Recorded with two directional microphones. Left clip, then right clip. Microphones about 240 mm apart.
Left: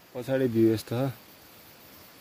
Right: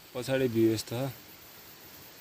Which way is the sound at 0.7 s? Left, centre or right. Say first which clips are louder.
Left 3 dB; left.